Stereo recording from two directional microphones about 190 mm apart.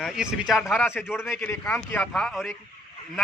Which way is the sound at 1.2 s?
10° left (ahead or behind).